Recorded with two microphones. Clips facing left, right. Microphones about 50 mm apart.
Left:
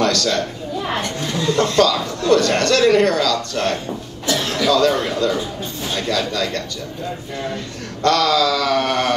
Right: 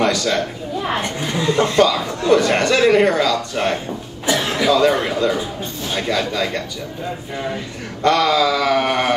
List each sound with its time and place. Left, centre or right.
0.0 s a woman's voice: centre
8.0 s a woman's voice: centre